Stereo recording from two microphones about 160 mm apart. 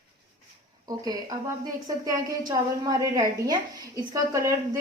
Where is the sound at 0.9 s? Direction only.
25° right (ahead or behind).